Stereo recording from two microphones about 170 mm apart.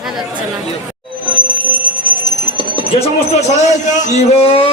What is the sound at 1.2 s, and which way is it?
Bell, 10° left (ahead or behind).